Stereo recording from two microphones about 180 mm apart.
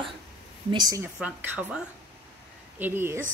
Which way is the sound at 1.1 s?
5° right (ahead or behind).